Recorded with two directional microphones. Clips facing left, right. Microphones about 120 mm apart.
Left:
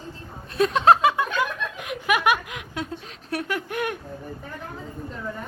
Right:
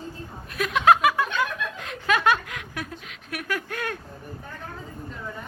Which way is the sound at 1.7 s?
15° left (ahead or behind).